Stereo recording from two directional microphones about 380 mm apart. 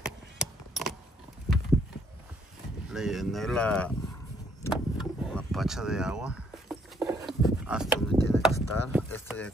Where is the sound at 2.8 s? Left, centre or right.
Centre.